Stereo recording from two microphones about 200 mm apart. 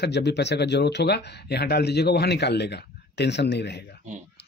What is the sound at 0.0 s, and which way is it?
Speech, 60° left (ahead or behind).